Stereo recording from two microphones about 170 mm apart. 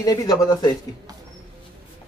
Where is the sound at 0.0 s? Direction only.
20° left (ahead or behind).